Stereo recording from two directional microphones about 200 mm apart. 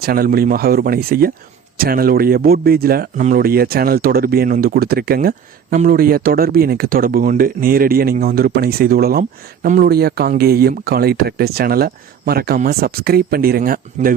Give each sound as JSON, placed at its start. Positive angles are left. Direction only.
{"t": 0.0, "sound": "speech", "side_deg": -50}